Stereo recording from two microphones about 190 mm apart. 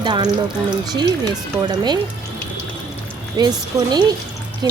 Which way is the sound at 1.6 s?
20° right (ahead or behind).